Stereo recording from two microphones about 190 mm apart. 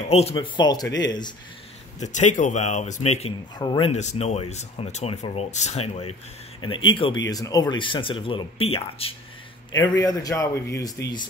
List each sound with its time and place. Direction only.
0.1 s speech: 30° left (ahead or behind)
2.0 s speech: 40° left (ahead or behind)
3.5 s speech: 20° left (ahead or behind)
3.9 s speech: 35° left (ahead or behind)
9.8 s speech: 20° left (ahead or behind)